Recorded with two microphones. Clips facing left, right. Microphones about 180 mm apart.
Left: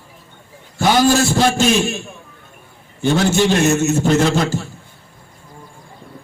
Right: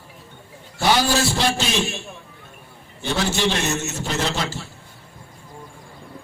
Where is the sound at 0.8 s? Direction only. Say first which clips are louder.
Left 5 dB; 45° left (ahead or behind).